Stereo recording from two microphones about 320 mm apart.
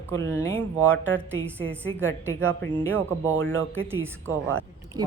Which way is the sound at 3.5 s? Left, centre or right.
Right.